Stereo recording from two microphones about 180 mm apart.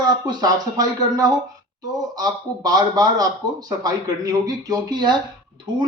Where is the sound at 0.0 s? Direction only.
20° right (ahead or behind).